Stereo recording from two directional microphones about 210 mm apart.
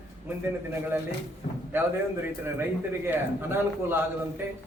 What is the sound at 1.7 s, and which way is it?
A man's voice, 10° right (ahead or behind).